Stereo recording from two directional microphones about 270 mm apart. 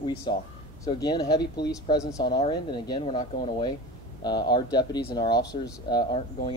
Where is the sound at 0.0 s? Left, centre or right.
Centre.